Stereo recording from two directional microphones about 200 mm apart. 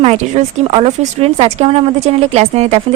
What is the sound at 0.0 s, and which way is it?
Speech, 30° right (ahead or behind).